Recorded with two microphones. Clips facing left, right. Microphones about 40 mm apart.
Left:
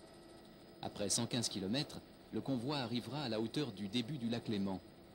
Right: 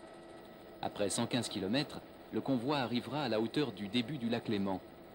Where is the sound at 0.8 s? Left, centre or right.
Right.